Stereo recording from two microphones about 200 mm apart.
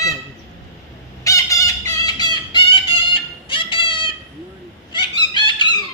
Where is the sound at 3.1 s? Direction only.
25° left (ahead or behind).